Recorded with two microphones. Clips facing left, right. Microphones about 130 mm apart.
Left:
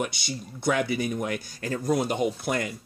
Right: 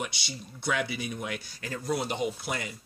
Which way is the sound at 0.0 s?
50° left (ahead or behind).